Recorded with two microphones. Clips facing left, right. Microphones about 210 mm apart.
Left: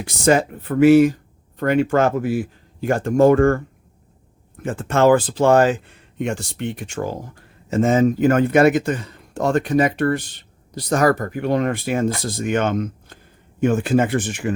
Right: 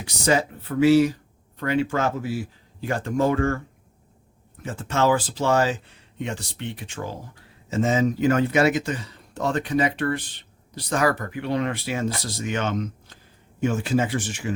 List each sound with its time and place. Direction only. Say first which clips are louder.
0.0 s speech: left 5 dB; 50° left (ahead or behind)
4.6 s speech: left 6 dB; 55° left (ahead or behind)